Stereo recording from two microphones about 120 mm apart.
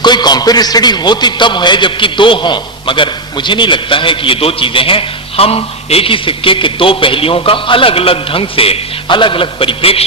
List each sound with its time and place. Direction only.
0.0 s a man's voice: 35° left (ahead or behind); by 10.1 s 50° left (ahead or behind)